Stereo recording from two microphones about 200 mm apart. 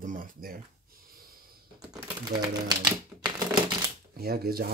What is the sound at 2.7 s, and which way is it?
Speech, 20° right (ahead or behind).